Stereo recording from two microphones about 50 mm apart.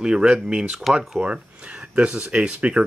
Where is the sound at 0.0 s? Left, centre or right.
Centre.